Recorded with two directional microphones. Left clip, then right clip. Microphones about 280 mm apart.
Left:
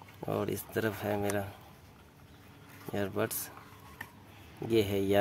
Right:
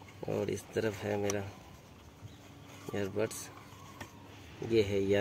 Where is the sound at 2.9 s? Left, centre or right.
Left.